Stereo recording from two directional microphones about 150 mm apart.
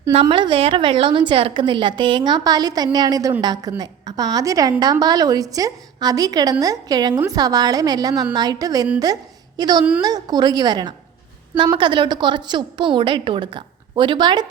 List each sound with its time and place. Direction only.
0.1 s a woman's voice: 40° right (ahead or behind)